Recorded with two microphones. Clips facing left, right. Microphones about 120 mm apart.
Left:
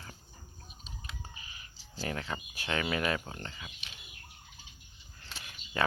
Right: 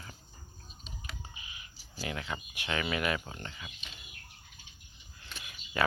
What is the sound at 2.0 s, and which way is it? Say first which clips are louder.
Speech: left 1 dB; 35° left (ahead or behind).